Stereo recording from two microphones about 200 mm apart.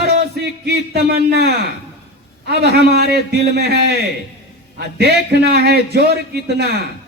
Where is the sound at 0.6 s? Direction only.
55° right (ahead or behind).